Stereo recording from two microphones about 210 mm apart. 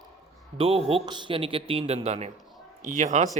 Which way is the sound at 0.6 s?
25° right (ahead or behind).